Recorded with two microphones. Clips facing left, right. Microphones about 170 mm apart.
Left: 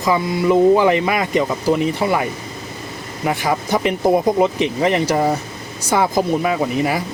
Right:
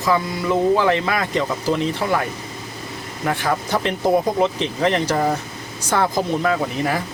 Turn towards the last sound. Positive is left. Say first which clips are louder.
# left 2 dB
turn(degrees=10)  # may be behind; listen again after turning